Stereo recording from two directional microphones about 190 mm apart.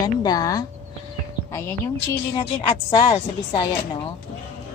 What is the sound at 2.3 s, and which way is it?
A woman's voice, 25° left (ahead or behind).